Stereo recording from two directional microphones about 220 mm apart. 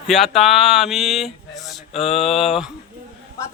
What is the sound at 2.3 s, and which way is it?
Speech, centre (ahead or behind).